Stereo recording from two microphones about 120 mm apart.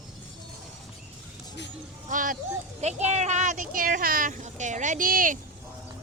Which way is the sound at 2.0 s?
90° right.